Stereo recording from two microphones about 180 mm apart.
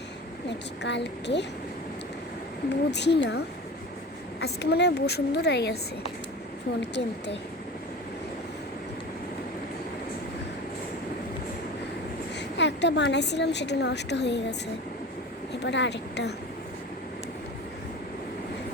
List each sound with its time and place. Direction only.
0.4 s a woman's voice: 75° left (ahead or behind)
2.6 s a woman's voice: 70° left (ahead or behind)
12.4 s a woman's voice: 75° left (ahead or behind)
15.6 s a woman's voice: 75° left (ahead or behind)